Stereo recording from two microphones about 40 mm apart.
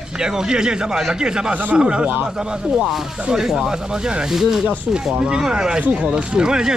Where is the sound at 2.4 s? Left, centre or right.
Centre.